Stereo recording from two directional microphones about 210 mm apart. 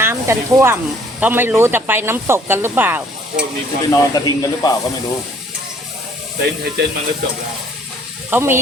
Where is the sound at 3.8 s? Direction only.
15° left (ahead or behind).